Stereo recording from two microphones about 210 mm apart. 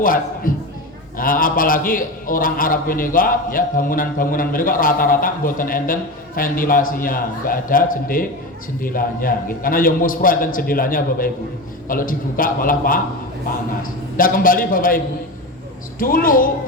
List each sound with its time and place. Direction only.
0.0 s a man's voice: 40° left (ahead or behind)